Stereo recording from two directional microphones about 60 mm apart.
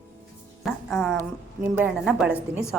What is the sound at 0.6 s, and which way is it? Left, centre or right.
Speech, centre.